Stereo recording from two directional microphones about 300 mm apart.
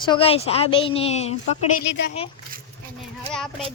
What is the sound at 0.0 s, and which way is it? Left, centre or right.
A woman's voice, centre.